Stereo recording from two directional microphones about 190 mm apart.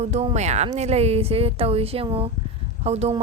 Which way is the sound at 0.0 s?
35° right (ahead or behind).